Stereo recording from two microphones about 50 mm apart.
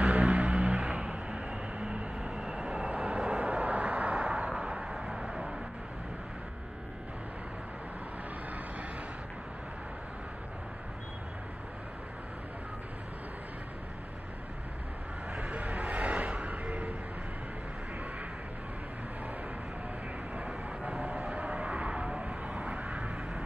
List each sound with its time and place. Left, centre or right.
0.1 s a sound: right
2.1 s vehicle: centre
15.3 s vehicle: right
20.3 s vehicle: right